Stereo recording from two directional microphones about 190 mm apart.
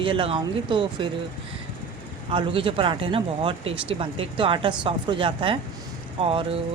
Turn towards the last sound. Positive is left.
turn(degrees=-30)  # may be behind; listen again after turning